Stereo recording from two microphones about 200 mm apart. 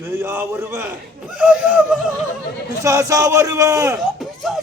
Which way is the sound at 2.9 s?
15° right (ahead or behind).